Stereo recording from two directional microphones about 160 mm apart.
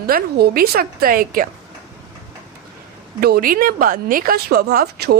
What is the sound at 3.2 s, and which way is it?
A woman's voice, 70° right (ahead or behind).